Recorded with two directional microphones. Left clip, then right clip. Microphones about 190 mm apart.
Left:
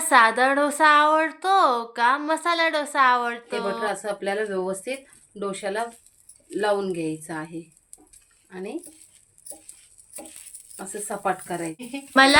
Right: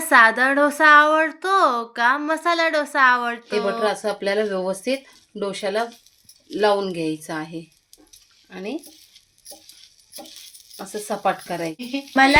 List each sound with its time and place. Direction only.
0.0 s a woman's voice: 10° right (ahead or behind)
3.8 s speech: 50° right (ahead or behind)
8.4 s speech: 40° right (ahead or behind)
11.2 s speech: 45° right (ahead or behind)
11.9 s speech: centre (ahead or behind)